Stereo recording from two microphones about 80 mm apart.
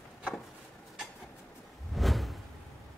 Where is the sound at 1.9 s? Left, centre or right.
Centre.